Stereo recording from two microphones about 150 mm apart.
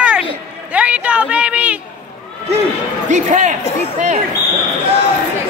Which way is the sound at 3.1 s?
55° right (ahead or behind).